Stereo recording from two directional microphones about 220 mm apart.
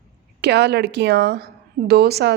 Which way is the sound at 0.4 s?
50° right (ahead or behind).